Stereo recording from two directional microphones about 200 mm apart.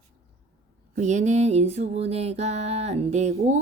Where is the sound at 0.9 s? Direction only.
35° right (ahead or behind).